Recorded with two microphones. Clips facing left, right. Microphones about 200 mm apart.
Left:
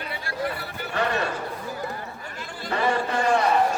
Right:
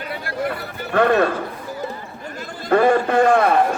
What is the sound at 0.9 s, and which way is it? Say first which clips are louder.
Speech: right 10 dB; 55° right (ahead or behind).